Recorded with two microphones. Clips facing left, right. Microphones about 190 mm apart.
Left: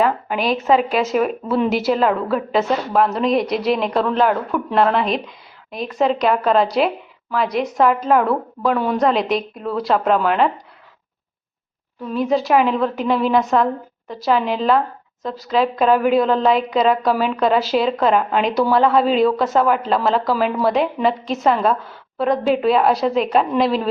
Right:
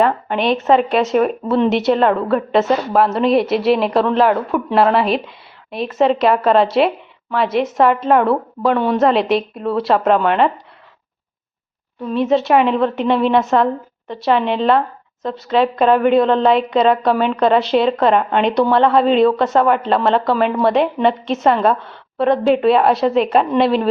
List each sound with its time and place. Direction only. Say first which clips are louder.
0.0 s a woman's voice: right 3 dB; 5° left (ahead or behind)
12.0 s a woman's voice: right 3 dB; centre (ahead or behind)